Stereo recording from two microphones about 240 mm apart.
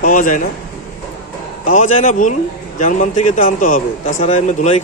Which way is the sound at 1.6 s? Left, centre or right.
Left.